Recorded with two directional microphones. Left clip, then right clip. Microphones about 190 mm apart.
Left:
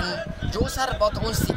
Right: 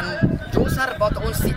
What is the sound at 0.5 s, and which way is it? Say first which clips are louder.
Speech: right 3 dB; 35° right (ahead or behind).